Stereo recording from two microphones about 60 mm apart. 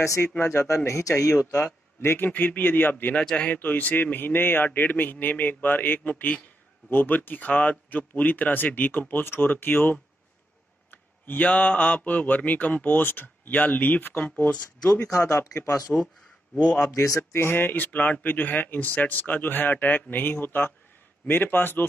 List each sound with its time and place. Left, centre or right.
0.0 s a man's voice: left
2.0 s speech: left
15.0 s a man's voice: left
16.5 s speech: centre
16.9 s a man's voice: left
17.4 s speech: left